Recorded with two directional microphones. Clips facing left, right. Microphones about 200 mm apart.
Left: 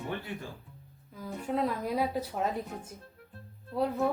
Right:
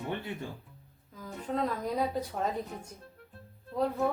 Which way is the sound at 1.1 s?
10° left (ahead or behind).